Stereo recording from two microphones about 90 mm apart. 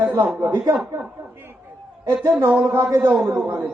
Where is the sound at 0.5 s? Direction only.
40° right (ahead or behind).